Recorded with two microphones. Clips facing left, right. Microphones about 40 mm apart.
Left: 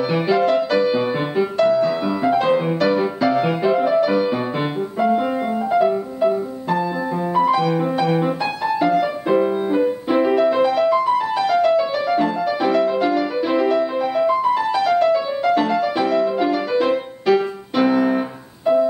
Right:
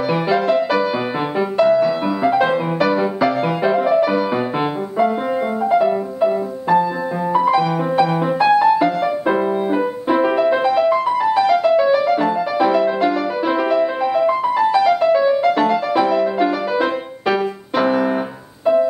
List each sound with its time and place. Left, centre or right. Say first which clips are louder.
0.1 s music: right 1 dB; centre
8.2 s music: right 7 dB; centre